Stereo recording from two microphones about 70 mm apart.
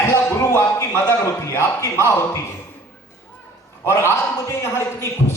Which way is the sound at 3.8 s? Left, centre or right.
Left.